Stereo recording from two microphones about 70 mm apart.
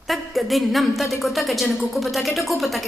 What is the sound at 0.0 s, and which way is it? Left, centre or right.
A woman's voice, centre.